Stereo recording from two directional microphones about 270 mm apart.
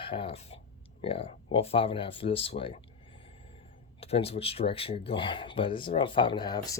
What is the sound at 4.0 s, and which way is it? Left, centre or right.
Speech, left.